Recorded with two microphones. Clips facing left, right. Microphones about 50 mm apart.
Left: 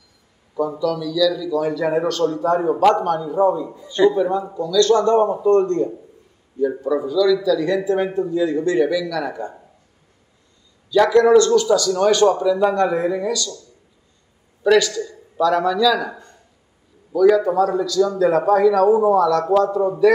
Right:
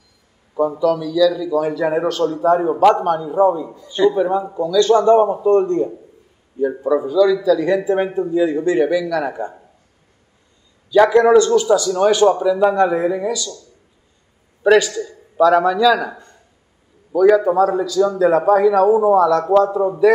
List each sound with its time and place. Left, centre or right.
0.6 s a man's voice: right; by 3.0 s centre
3.0 s a man's voice: centre
6.8 s a man's voice: right
10.9 s a man's voice: right
14.6 s a man's voice: right